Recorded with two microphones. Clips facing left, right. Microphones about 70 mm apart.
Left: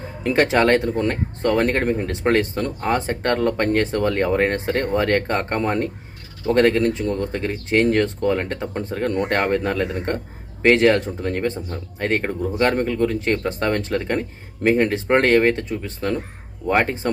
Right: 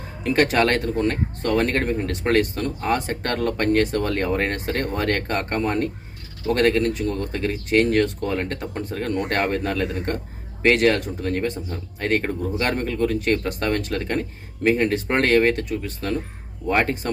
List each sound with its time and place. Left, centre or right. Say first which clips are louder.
0.2 s speech: left 2 dB; left